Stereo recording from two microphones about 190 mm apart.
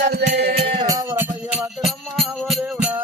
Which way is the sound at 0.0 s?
60° right (ahead or behind).